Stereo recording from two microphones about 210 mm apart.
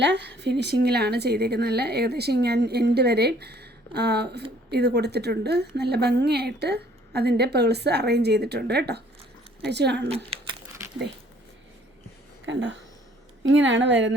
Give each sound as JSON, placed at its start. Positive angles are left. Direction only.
{"t": 0.0, "sound": "a woman's voice", "side_deg": -55}
{"t": 12.5, "sound": "a woman's voice", "side_deg": -60}